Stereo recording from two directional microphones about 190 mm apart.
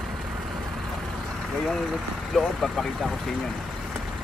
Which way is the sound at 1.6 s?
Centre (ahead or behind).